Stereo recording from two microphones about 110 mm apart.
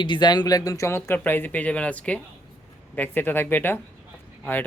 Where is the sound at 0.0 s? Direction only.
45° left (ahead or behind).